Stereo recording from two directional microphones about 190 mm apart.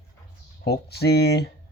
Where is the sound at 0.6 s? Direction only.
60° left (ahead or behind).